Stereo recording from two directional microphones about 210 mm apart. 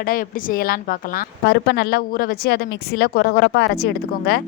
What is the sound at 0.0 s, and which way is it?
A woman's voice, 45° left (ahead or behind).